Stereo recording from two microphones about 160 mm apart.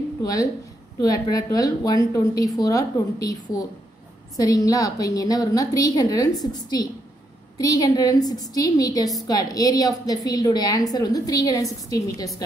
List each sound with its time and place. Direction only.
0.2 s a woman's voice: 20° left (ahead or behind)